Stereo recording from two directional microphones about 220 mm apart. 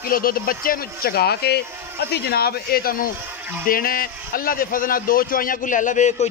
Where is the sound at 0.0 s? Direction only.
40° left (ahead or behind).